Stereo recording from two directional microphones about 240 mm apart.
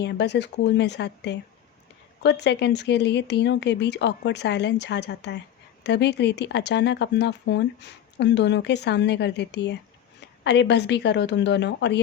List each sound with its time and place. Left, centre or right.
0.0 s speech: left